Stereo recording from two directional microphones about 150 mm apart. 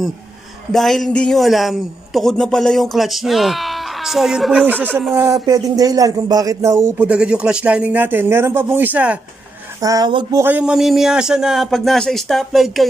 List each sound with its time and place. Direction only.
0.7 s a man's voice: centre (ahead or behind)
5.1 s speech: 20° right (ahead or behind)
7.0 s speech: 5° right (ahead or behind)
9.8 s speech: 25° right (ahead or behind)
10.4 s a man's voice: 10° right (ahead or behind)